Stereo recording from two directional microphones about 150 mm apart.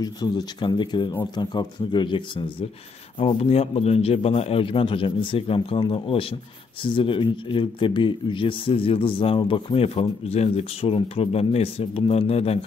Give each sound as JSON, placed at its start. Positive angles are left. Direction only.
{"t": 0.0, "sound": "speech", "side_deg": 30}